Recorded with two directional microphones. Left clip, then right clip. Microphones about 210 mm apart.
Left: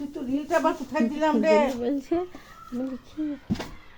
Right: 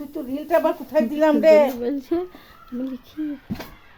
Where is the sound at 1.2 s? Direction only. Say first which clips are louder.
Right 7 dB; 50° right (ahead or behind).